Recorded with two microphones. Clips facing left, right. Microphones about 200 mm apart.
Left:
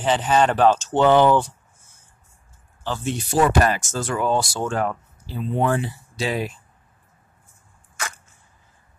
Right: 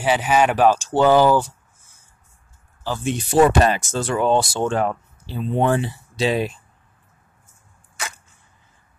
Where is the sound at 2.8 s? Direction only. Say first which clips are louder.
Right 2 dB; 15° right (ahead or behind).